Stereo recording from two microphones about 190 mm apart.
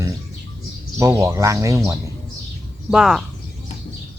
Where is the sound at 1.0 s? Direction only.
15° right (ahead or behind).